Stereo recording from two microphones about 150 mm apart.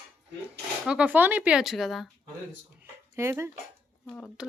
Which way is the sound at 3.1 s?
20° right (ahead or behind).